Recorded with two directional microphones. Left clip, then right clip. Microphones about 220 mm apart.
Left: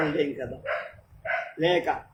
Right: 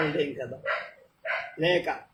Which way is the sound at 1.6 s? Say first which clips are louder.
Left 1 dB; 15° left (ahead or behind).